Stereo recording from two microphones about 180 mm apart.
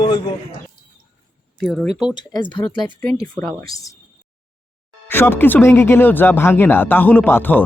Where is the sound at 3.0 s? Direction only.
15° left (ahead or behind).